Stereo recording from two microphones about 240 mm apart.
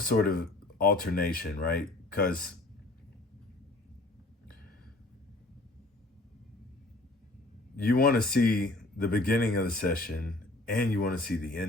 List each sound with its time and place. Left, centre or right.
0.0 s speech: left
7.8 s speech: left